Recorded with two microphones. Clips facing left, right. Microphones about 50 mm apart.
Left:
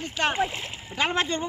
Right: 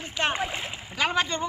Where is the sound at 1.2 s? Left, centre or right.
Centre.